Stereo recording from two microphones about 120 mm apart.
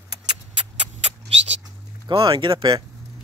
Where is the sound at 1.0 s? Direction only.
60° right (ahead or behind).